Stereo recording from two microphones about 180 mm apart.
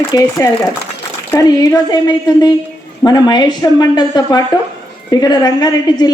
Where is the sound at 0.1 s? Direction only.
15° left (ahead or behind).